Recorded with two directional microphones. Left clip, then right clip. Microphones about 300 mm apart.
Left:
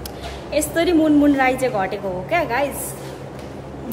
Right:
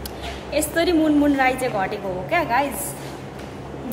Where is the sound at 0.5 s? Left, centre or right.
Centre.